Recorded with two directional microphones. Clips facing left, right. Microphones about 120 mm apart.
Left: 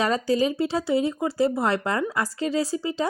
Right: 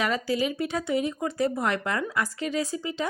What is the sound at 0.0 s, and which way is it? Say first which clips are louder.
A woman's voice: left 4 dB; 35° left (ahead or behind).